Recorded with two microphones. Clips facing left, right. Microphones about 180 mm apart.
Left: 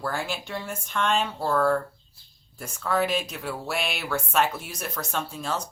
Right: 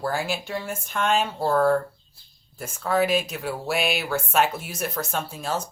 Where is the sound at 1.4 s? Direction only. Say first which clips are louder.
Right 3 dB; 30° right (ahead or behind).